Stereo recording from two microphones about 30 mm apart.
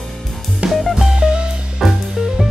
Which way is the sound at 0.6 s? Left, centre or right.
Right.